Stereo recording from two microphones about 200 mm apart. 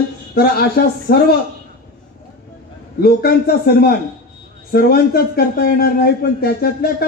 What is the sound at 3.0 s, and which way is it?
A man's voice, 50° left (ahead or behind).